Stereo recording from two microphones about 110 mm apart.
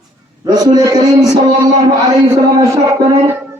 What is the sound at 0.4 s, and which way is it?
Speech, 40° right (ahead or behind).